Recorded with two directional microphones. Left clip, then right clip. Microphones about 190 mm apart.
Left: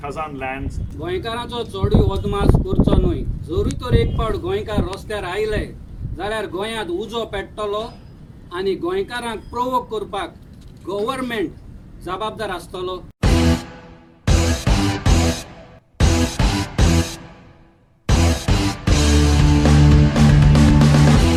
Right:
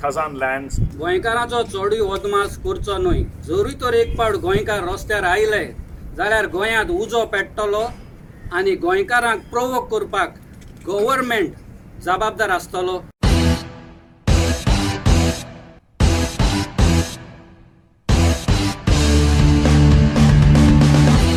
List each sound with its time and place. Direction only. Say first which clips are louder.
0.0 s speech: right 6 dB; 20° left (ahead or behind)
13.2 s music: left 2 dB; centre (ahead or behind)